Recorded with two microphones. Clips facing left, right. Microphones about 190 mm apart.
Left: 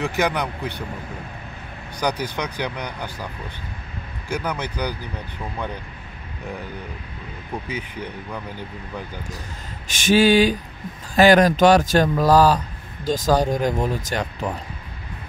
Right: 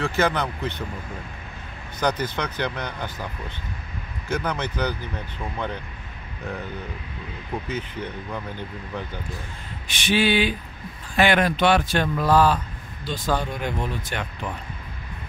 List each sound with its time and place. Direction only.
0.0 s speech: 15° left (ahead or behind)
2.0 s speech: 10° left (ahead or behind)
4.3 s speech: 10° left (ahead or behind)
7.6 s speech: 10° left (ahead or behind)
10.0 s a man's voice: 40° left (ahead or behind)